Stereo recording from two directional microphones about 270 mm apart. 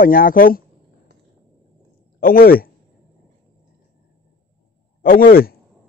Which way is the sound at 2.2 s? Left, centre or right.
Left.